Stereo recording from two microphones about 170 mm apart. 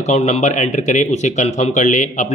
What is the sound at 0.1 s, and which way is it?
Speech, 40° left (ahead or behind).